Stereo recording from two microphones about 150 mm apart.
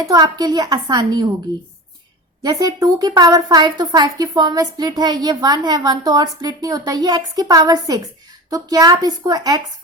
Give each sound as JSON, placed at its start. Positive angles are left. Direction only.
{"t": 0.0, "sound": "a woman's voice", "side_deg": -25}
{"t": 2.4, "sound": "a woman's voice", "side_deg": -25}